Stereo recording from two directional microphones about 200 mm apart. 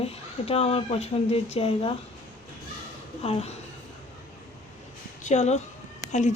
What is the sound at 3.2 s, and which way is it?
Speech, 30° left (ahead or behind).